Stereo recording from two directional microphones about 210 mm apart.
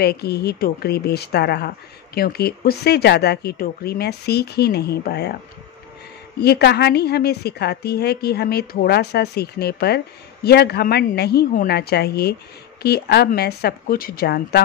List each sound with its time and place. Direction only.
0.0 s a woman's voice: 50° left (ahead or behind)
6.4 s a woman's voice: 50° left (ahead or behind)